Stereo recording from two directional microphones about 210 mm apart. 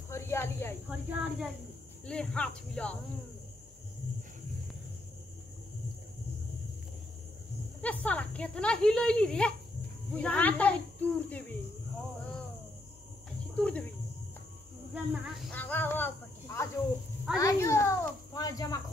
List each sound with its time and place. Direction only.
0.1 s cricket: 10° left (ahead or behind)
0.8 s speech: 5° right (ahead or behind)
2.0 s speech: 5° left (ahead or behind)
7.8 s speech: 5° left (ahead or behind)
13.6 s speech: 5° left (ahead or behind)
15.2 s snake: centre (ahead or behind)
17.4 s a child's voice: 15° left (ahead or behind)